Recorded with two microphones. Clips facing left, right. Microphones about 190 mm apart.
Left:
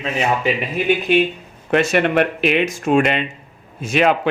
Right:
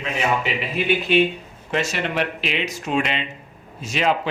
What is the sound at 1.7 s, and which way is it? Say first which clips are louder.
A man's voice: left 8 dB; 55° left (ahead or behind).